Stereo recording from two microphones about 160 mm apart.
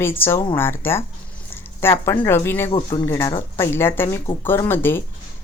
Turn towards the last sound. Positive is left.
turn(degrees=15)  # may be behind; listen again after turning